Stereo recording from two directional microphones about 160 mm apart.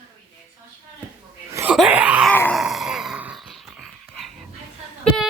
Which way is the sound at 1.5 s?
15° right (ahead or behind).